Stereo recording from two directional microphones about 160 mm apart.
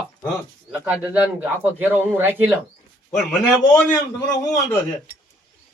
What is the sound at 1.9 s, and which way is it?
Speech, 15° right (ahead or behind).